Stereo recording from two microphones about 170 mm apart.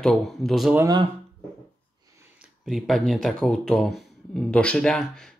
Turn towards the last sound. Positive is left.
turn(degrees=5)  # may be behind; listen again after turning